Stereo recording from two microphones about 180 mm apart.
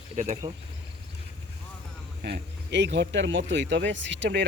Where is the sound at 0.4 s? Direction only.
30° right (ahead or behind).